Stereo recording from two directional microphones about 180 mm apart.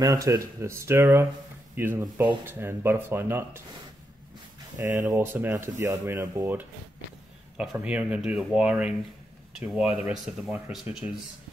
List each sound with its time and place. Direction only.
0.0 s speech: 20° right (ahead or behind)
4.8 s speech: 15° right (ahead or behind)